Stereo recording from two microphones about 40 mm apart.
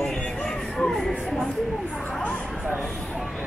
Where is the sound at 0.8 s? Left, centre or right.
Centre.